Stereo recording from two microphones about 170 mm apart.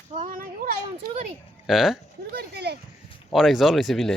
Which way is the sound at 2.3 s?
75° right (ahead or behind).